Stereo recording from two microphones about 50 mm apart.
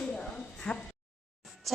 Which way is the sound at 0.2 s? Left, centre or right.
Left.